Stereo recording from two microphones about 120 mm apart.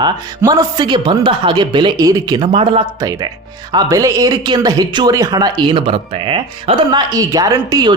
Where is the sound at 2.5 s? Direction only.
50° right (ahead or behind).